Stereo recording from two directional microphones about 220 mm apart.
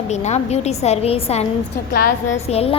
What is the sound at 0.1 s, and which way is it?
A woman's voice, 30° left (ahead or behind).